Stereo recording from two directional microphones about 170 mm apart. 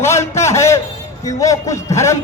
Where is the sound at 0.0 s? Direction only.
15° left (ahead or behind).